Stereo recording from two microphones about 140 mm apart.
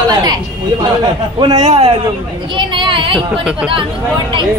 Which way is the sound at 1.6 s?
45° right (ahead or behind).